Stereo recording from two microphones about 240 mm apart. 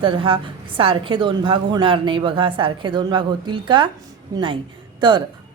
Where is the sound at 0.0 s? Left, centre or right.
Right.